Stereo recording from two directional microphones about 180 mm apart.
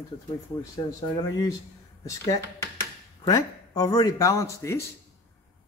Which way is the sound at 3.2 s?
20° left (ahead or behind).